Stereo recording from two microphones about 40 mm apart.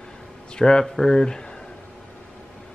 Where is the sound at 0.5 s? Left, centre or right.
Centre.